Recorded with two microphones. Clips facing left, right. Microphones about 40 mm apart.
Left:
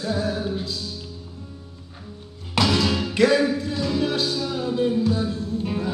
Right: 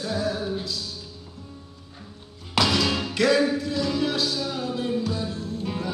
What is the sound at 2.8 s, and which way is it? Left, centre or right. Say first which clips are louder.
Music: left 2 dB; centre.